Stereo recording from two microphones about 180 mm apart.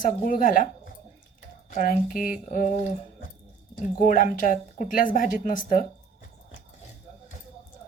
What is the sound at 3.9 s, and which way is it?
A woman's voice, 50° left (ahead or behind).